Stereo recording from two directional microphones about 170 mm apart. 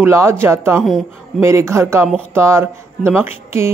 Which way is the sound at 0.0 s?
15° right (ahead or behind).